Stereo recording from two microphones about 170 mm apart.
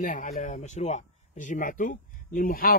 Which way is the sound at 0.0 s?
50° left (ahead or behind).